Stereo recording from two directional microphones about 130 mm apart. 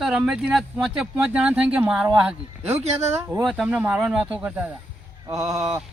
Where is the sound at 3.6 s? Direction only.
10° right (ahead or behind).